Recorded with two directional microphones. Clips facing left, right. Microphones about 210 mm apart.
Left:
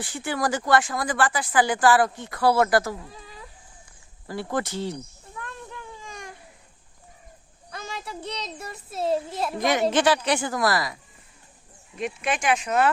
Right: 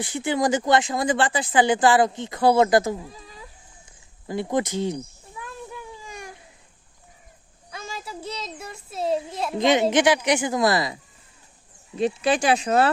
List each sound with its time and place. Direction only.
0.0 s speech: 20° right (ahead or behind)
3.0 s a sound: centre (ahead or behind)
4.3 s speech: 20° right (ahead or behind)
5.4 s baby cry: 10° right (ahead or behind)
7.7 s a child's voice: centre (ahead or behind)
9.6 s speech: 20° right (ahead or behind)